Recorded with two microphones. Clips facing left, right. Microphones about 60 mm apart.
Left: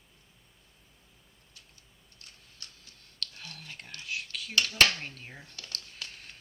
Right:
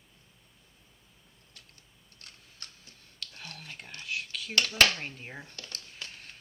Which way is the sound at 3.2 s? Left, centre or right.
Centre.